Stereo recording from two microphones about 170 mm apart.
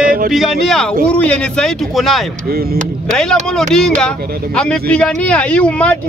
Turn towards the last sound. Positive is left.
turn(degrees=5)  # may be behind; listen again after turning